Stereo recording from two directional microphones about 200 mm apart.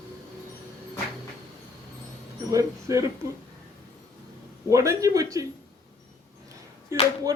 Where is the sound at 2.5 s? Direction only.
15° right (ahead or behind).